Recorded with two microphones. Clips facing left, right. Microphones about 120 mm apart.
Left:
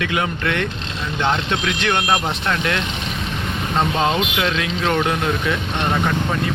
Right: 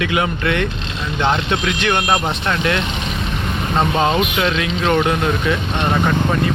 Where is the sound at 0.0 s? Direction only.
10° right (ahead or behind).